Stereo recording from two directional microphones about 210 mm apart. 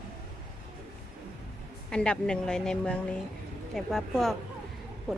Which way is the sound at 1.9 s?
5° left (ahead or behind).